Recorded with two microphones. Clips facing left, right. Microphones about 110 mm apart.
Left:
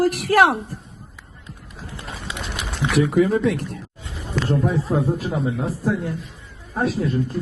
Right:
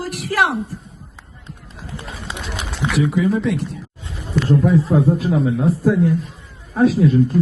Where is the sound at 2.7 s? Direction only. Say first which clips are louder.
Left 1 dB; 55° left (ahead or behind).